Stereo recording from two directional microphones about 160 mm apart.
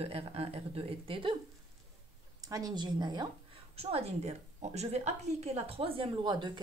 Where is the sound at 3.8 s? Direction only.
40° right (ahead or behind).